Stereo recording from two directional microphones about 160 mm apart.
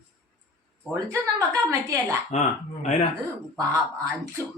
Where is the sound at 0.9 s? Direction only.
20° right (ahead or behind).